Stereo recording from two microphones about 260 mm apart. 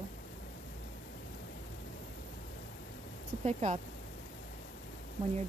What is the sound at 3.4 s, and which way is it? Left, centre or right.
Speech, right.